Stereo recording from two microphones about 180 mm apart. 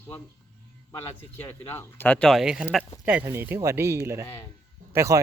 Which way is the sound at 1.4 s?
10° left (ahead or behind).